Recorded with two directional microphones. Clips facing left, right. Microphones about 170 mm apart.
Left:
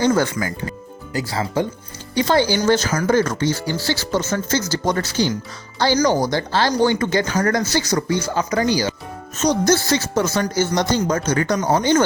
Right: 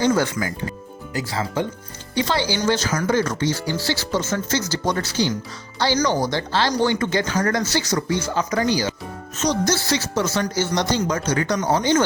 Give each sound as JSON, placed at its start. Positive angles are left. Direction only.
{"t": 0.0, "sound": "speech", "side_deg": 50}
{"t": 1.1, "sound": "speech", "side_deg": 35}
{"t": 9.4, "sound": "speech", "side_deg": 50}